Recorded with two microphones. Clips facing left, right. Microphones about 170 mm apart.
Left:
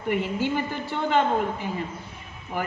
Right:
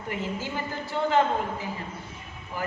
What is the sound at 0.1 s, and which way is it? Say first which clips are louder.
A man's voice: left 7 dB; 60° left (ahead or behind).